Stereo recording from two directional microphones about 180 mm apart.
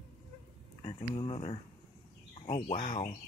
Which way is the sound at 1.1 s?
30° left (ahead or behind).